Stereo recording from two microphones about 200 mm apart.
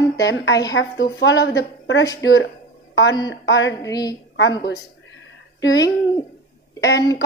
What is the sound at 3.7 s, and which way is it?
Speech, 15° left (ahead or behind).